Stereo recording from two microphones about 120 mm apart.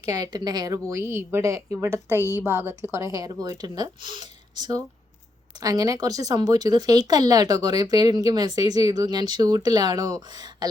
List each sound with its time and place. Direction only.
0.0 s a woman's voice: 30° right (ahead or behind)
2.0 s a woman's voice: 20° left (ahead or behind)
2.4 s speech: 15° right (ahead or behind); by 10.7 s 35° right (ahead or behind)